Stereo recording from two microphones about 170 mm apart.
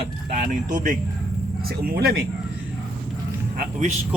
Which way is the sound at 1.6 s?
65° right (ahead or behind).